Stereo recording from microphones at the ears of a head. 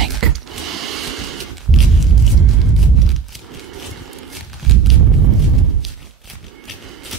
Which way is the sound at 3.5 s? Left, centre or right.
Right.